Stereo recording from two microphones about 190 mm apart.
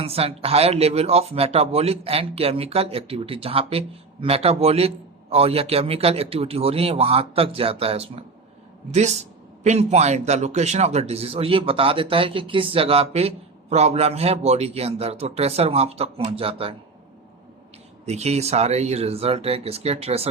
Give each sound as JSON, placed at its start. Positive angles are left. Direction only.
{"t": 0.0, "sound": "a man's voice", "side_deg": -30}
{"t": 18.0, "sound": "a man's voice", "side_deg": -35}